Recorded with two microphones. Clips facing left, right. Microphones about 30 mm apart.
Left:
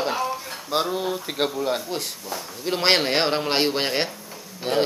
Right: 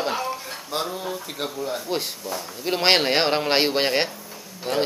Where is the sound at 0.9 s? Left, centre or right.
Centre.